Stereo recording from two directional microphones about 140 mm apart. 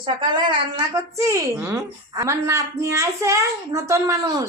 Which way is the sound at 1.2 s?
20° right (ahead or behind).